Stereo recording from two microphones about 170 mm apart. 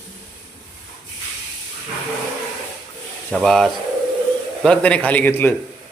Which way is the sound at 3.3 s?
Centre (ahead or behind).